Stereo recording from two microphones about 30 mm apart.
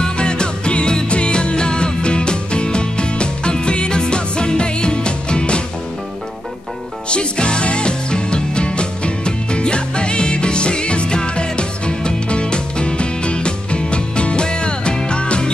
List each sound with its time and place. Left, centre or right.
0.0 s music: left
7.1 s music: left